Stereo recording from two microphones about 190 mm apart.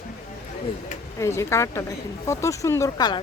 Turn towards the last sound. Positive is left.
turn(degrees=20)  # may be behind; listen again after turning